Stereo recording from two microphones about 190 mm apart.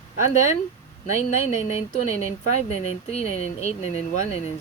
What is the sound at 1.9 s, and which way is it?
Speech, 35° left (ahead or behind).